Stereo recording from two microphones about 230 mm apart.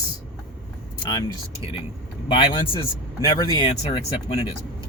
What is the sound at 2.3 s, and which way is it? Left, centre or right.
Speech, left.